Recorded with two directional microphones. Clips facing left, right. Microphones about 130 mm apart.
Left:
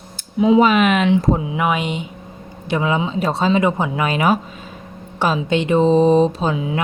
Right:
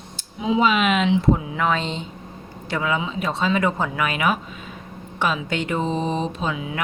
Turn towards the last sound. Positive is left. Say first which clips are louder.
# left 6 dB
turn(degrees=30)  # may be behind; listen again after turning